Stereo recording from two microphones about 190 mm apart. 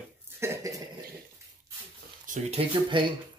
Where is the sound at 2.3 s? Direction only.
45° right (ahead or behind).